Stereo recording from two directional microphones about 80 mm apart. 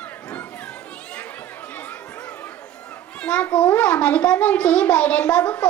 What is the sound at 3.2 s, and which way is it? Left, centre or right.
A child's voice, centre.